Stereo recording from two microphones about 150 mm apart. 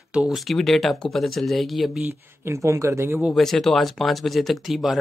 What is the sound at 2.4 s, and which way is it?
Speech, 20° right (ahead or behind).